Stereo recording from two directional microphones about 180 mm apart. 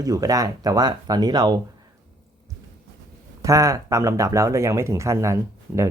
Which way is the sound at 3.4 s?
15° right (ahead or behind).